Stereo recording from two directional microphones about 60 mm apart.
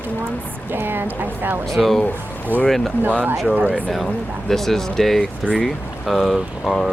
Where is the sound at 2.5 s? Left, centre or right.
Right.